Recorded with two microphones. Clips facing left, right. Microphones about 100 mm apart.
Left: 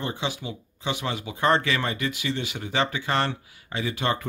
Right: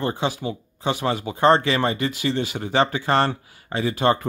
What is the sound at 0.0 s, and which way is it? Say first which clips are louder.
Speech: right 6 dB; 40° right (ahead or behind).